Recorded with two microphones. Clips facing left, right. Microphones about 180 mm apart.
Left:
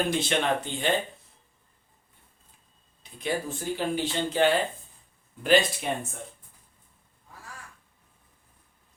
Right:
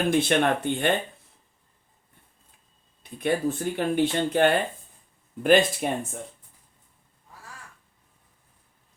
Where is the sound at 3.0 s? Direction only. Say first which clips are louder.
Right 6 dB; 55° right (ahead or behind).